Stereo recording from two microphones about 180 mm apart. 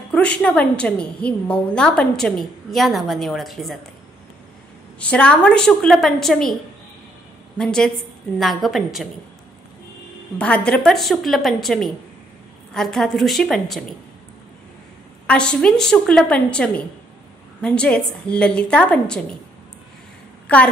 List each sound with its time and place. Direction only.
0.1 s a woman's voice: 5° left (ahead or behind)
4.9 s a woman's voice: 5° left (ahead or behind)
7.5 s a woman's voice: 5° left (ahead or behind)
10.3 s a woman's voice: 5° left (ahead or behind)
15.2 s a woman's voice: 5° left (ahead or behind)
20.4 s a woman's voice: 10° left (ahead or behind)